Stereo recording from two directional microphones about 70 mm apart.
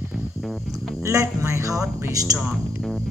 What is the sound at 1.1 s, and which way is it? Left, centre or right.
Speech, right.